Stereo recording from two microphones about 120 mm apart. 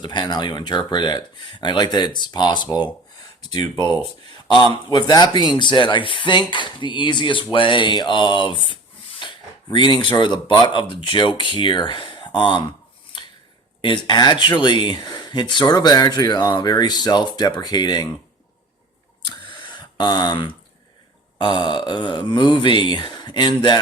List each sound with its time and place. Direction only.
0.0 s speech: 35° left (ahead or behind)
13.8 s speech: 40° left (ahead or behind)
19.3 s a sound: 40° left (ahead or behind)
21.3 s speech: 40° left (ahead or behind)